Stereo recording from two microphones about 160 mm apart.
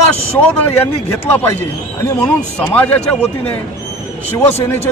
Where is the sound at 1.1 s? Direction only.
10° left (ahead or behind).